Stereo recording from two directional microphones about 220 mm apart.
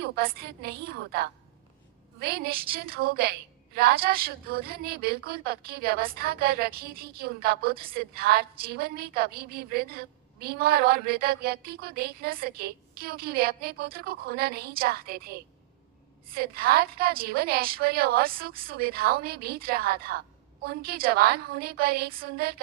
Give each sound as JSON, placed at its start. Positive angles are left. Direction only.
{"t": 0.0, "sound": "a woman's voice", "side_deg": -45}
{"t": 2.1, "sound": "a woman's voice", "side_deg": -45}
{"t": 16.3, "sound": "a woman's voice", "side_deg": -45}